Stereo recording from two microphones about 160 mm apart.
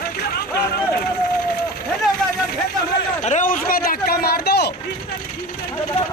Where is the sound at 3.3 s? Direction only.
55° left (ahead or behind); by 4.7 s 90° left.